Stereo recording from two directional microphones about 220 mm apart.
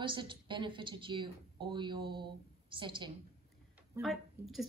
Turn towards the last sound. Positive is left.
turn(degrees=0)  # may be behind; listen again after turning